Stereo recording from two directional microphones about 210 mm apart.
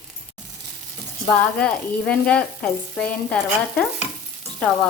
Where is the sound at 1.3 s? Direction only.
5° left (ahead or behind).